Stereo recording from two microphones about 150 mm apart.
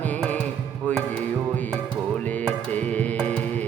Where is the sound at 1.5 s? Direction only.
10° left (ahead or behind).